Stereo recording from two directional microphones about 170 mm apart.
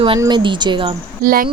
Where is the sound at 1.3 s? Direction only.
55° right (ahead or behind).